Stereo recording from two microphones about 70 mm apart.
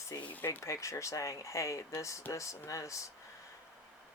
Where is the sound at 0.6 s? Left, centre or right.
Left.